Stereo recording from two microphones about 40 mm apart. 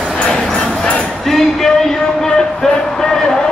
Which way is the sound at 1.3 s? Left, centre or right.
Centre.